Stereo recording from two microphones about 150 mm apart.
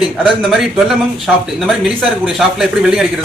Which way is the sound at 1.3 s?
10° right (ahead or behind).